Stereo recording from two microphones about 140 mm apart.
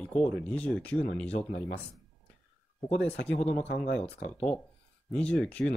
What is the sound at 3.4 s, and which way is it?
Speech, 50° left (ahead or behind).